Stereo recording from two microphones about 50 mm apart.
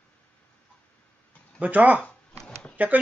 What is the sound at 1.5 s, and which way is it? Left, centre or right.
Speech, right.